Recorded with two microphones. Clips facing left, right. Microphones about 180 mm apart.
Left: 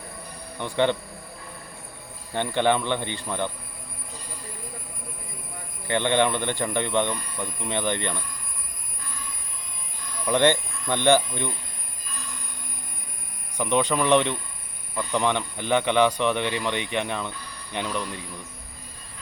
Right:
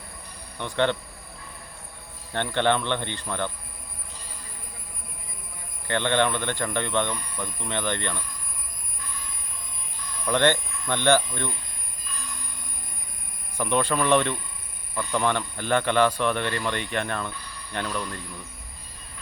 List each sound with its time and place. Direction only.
0.6 s speech: 15° left (ahead or behind)
2.3 s speech: 10° left (ahead or behind)
5.9 s speech: 15° left (ahead or behind)
10.2 s speech: 15° left (ahead or behind)
13.6 s speech: 15° left (ahead or behind)